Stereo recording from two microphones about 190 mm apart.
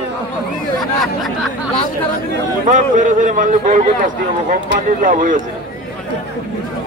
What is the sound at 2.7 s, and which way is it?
Speech, 40° right (ahead or behind).